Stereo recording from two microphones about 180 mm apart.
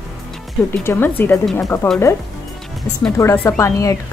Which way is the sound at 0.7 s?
10° left (ahead or behind).